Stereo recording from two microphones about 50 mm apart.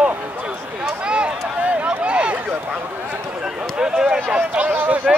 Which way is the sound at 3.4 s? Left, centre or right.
Centre.